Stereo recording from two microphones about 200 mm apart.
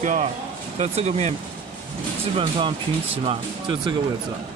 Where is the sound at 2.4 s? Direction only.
25° right (ahead or behind).